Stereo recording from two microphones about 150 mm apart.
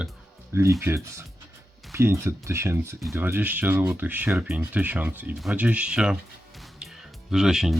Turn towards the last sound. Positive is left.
turn(degrees=-5)  # may be behind; listen again after turning